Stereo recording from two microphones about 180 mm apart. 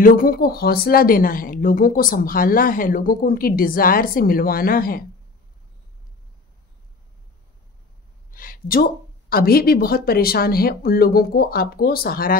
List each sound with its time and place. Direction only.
0.0 s a woman's voice: 50° left (ahead or behind)
8.3 s a sound: 50° left (ahead or behind)
9.3 s speech: 55° left (ahead or behind)